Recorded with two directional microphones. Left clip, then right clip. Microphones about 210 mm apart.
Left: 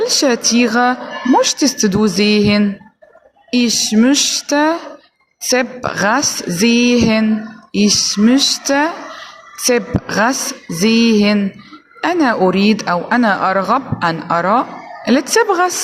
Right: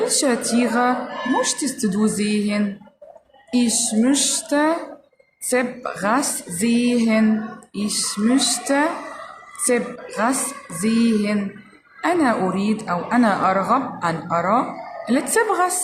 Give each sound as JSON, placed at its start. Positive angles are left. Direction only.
{"t": 0.0, "sound": "a woman's voice", "side_deg": 35}